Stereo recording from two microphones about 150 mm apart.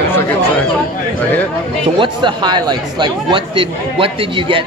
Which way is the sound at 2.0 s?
30° right (ahead or behind).